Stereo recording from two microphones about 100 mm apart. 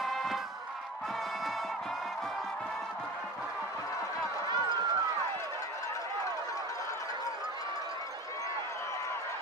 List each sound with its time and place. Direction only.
0.0 s music: centre (ahead or behind)
4.5 s run: 45° right (ahead or behind)